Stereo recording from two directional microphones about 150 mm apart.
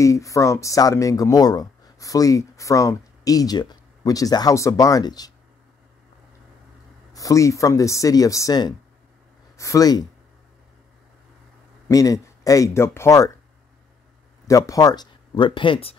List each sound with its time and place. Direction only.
0.0 s speech: 20° left (ahead or behind)
7.2 s speech: 20° left (ahead or behind)
11.9 s speech: 20° left (ahead or behind)
14.5 s speech: 25° left (ahead or behind)